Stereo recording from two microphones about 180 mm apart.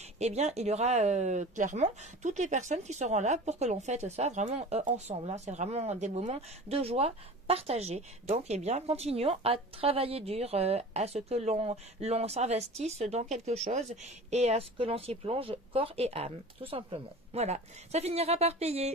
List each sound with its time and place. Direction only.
0.2 s speech: 35° right (ahead or behind)